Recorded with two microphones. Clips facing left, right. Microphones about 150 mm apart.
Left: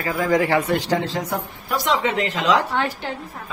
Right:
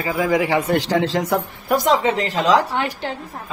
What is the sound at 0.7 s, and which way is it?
Speech, 90° right.